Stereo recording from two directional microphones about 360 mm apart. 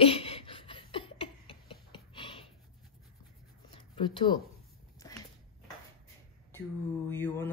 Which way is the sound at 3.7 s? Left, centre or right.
Centre.